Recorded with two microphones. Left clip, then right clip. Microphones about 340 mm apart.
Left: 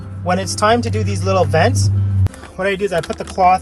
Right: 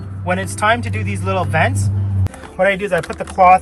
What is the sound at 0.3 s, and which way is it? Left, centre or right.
Speech, centre.